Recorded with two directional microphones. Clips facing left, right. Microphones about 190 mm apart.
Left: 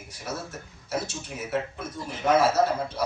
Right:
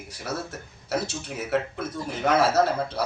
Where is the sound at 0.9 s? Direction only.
65° right (ahead or behind).